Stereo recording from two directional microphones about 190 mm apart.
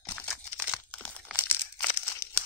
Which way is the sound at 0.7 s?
5° left (ahead or behind).